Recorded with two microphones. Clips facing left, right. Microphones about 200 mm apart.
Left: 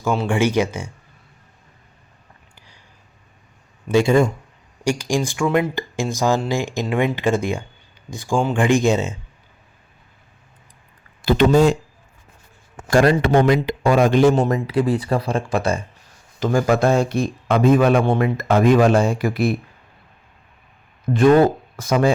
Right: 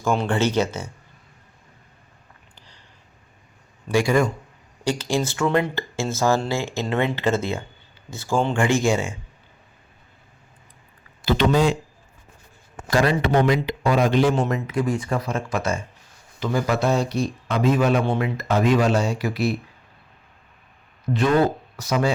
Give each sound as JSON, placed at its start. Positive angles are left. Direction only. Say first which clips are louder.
{"t": 0.0, "sound": "speech", "louder": "left 2 dB", "side_deg": 5}
{"t": 2.6, "sound": "a sound", "louder": "even", "side_deg": 10}
{"t": 3.8, "sound": "speech", "louder": "left 4 dB", "side_deg": 25}
{"t": 4.8, "sound": "speech", "louder": "left 2 dB", "side_deg": 15}
{"t": 11.3, "sound": "speech", "louder": "left 5 dB", "side_deg": 50}
{"t": 12.9, "sound": "speech", "louder": "left 5 dB", "side_deg": 45}
{"t": 16.4, "sound": "speech", "louder": "left 5 dB", "side_deg": 45}
{"t": 21.1, "sound": "speech", "louder": "left 3 dB", "side_deg": 65}
{"t": 21.8, "sound": "speech", "louder": "left 5 dB", "side_deg": 50}